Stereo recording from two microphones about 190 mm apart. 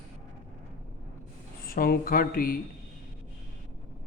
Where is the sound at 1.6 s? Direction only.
50° left (ahead or behind).